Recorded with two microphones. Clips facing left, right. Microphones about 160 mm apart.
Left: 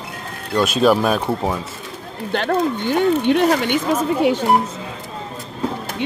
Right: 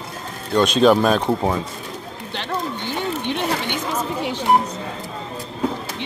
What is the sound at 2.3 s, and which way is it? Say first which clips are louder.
Speech: left 8 dB; 50° left (ahead or behind).